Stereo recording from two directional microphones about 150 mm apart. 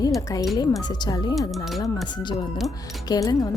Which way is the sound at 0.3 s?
25° left (ahead or behind).